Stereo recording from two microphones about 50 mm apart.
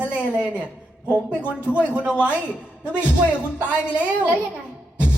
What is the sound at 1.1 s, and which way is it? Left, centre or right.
Speech, left.